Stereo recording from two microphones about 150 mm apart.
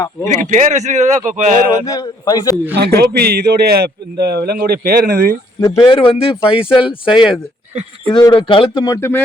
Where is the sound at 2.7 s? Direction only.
90° right.